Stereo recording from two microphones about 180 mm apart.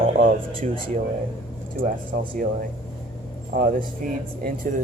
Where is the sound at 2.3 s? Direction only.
50° right (ahead or behind).